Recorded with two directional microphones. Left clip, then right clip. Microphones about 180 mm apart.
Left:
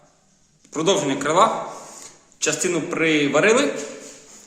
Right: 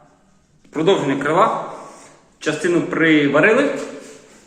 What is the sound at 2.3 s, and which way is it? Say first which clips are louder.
A man's voice: right 4 dB; 15° left (ahead or behind).